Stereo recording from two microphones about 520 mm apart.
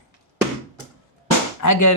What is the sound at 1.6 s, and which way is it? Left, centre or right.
Speech, left.